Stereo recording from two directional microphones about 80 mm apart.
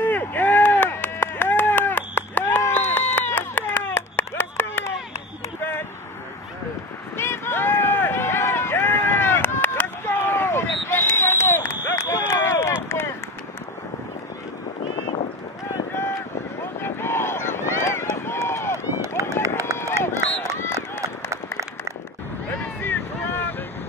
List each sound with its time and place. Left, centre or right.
0.0 s run: left
2.7 s baby cry: left
5.6 s a sound: left
7.2 s run: left
11.9 s a sound: left
12.8 s run: left
16.8 s run: left
18.9 s run: right
20.5 s run: left
21.0 s a sound: right
22.8 s boat: left